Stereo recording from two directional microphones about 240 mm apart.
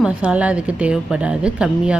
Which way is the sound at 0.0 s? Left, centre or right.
Centre.